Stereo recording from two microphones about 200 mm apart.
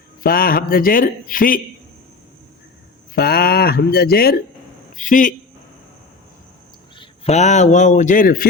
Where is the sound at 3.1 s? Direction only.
50° left (ahead or behind).